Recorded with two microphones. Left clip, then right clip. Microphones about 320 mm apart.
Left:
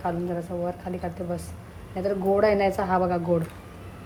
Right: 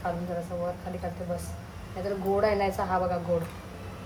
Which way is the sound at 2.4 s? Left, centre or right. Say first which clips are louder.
Left 4 dB; left.